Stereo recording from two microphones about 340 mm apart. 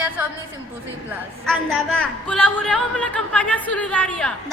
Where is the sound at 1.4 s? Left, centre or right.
Centre.